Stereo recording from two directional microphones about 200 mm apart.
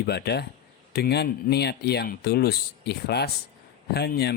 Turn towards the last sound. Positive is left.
turn(degrees=55)  # may be behind; listen again after turning